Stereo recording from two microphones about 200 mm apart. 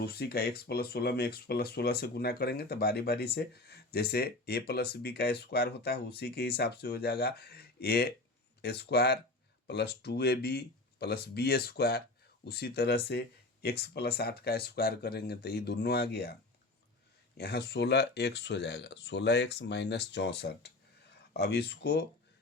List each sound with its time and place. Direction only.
0.0 s speech: 50° left (ahead or behind)
17.3 s speech: 55° left (ahead or behind)